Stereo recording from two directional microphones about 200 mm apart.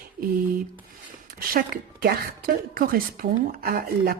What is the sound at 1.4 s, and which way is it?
A woman's voice, 50° right (ahead or behind).